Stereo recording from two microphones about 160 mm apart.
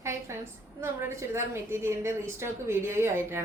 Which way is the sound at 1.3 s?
15° right (ahead or behind).